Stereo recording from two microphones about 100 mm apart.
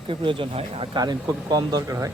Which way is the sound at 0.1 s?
60° right (ahead or behind).